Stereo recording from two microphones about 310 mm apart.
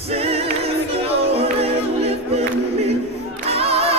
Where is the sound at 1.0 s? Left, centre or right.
Centre.